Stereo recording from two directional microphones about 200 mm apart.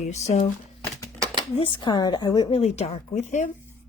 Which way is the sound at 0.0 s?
35° left (ahead or behind).